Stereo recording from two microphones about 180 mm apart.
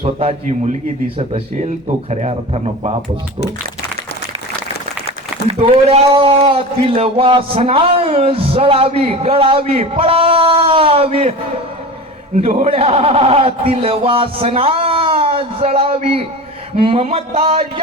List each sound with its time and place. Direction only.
0.0 s a man's voice: 35° right (ahead or behind)
5.5 s a man's voice: 35° right (ahead or behind)
12.6 s a man's voice: 35° right (ahead or behind)